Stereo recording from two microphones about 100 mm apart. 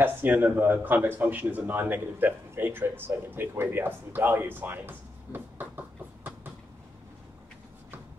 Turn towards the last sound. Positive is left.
turn(degrees=-20)  # may be behind; listen again after turning